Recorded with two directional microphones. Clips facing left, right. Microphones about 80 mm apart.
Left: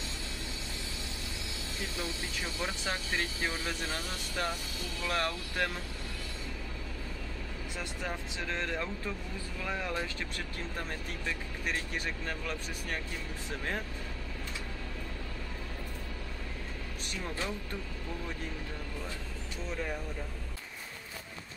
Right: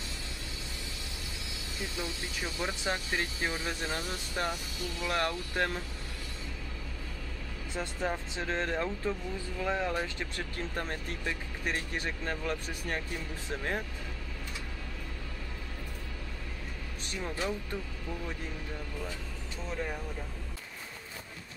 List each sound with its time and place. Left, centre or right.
1.8 s speech: centre
7.7 s speech: right
17.2 s speech: centre
19.7 s speech: centre